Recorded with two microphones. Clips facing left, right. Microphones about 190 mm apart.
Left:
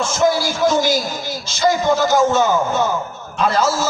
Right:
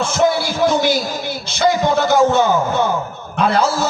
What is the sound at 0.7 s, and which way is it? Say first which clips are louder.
Speech: right 1 dB; 60° right (ahead or behind).